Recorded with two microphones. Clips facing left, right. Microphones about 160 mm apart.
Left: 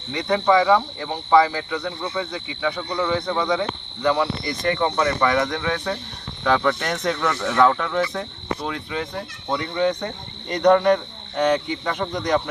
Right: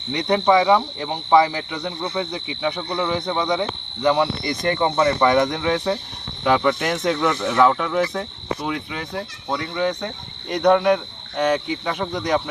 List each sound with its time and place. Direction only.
0.1 s speech: 15° right (ahead or behind)